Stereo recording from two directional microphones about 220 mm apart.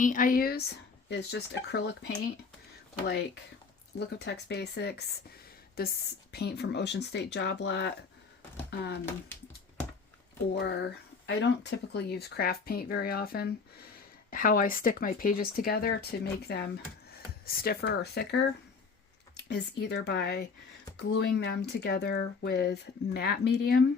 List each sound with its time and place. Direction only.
0.0 s speech: 35° left (ahead or behind)
10.5 s speech: 45° left (ahead or behind)
19.5 s speech: 50° left (ahead or behind)